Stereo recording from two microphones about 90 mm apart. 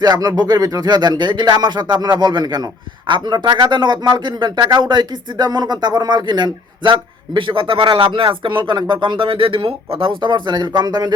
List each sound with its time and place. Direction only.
0.0 s speech: 50° right (ahead or behind)